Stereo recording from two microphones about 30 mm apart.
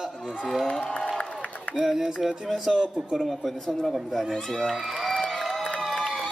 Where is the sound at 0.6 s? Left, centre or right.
Left.